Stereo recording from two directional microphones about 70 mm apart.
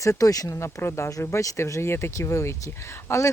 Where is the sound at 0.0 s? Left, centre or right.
Left.